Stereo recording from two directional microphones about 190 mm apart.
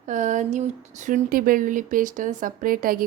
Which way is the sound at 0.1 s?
40° right (ahead or behind).